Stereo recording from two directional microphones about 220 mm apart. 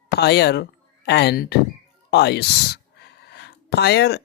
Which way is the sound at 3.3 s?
50° left (ahead or behind).